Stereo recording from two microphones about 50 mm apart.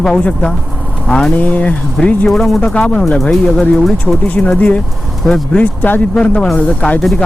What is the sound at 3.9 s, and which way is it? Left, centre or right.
Speech, left.